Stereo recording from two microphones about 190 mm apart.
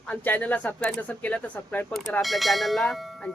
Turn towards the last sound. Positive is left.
turn(degrees=0)  # may be behind; listen again after turning